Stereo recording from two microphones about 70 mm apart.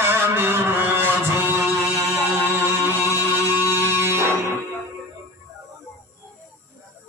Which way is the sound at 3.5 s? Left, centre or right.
Right.